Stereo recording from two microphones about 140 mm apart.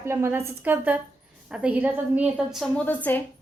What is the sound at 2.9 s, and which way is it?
Speech, 10° left (ahead or behind).